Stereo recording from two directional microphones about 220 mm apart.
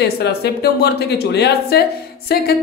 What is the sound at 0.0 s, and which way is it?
A woman's voice, 45° left (ahead or behind).